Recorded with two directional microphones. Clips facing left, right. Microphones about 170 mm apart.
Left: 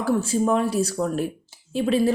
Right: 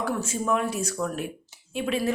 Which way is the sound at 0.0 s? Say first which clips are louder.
Left 7 dB; 35° left (ahead or behind).